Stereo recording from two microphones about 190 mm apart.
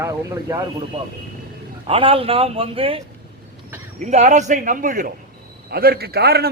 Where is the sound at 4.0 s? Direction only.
40° right (ahead or behind); by 6.4 s 55° right (ahead or behind).